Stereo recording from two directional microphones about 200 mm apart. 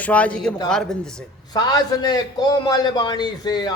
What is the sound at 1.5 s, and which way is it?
A man's voice, 20° left (ahead or behind).